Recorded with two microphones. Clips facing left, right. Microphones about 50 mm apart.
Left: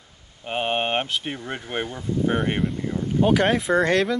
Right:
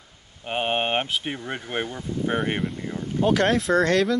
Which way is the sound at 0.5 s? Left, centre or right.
Centre.